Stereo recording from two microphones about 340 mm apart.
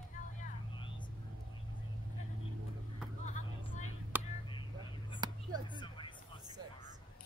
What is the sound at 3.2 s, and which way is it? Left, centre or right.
Vehicle, left.